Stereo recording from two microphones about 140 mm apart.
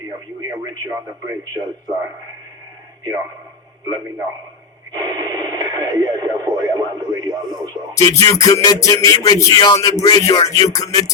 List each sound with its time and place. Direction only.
0.6 s speech: 25° right (ahead or behind)
4.9 s speech: 25° right (ahead or behind)
7.9 s music: 20° left (ahead or behind)